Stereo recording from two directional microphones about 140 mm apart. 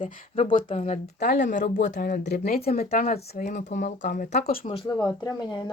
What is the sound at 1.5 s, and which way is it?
Speech, 80° left.